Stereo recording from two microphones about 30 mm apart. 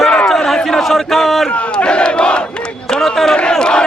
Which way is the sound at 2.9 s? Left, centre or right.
Centre.